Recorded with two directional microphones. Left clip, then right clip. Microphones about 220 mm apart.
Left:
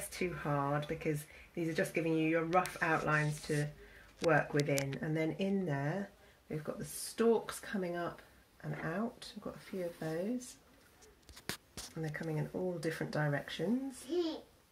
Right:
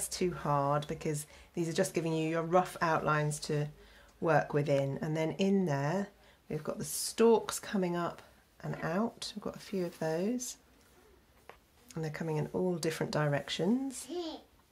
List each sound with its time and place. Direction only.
0.2 s speech: 45° right (ahead or behind)
11.9 s speech: 45° right (ahead or behind)